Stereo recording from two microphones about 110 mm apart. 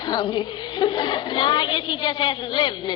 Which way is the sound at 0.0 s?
45° left (ahead or behind).